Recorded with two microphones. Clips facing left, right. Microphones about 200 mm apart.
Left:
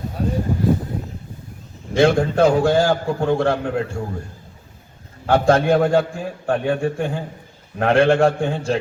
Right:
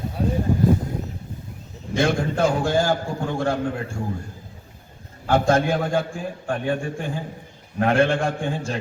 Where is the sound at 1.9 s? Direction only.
60° left (ahead or behind).